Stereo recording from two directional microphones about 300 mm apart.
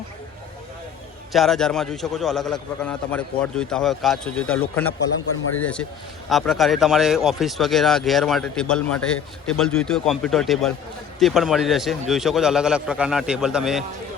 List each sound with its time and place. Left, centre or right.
1.3 s a man's voice: centre
4.9 s a man's voice: left
5.5 s a man's voice: centre